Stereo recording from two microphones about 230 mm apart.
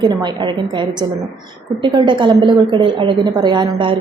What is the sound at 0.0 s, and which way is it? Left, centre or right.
A woman's voice, centre.